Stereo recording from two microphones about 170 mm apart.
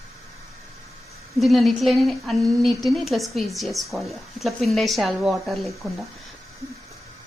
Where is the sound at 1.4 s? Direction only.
Centre (ahead or behind).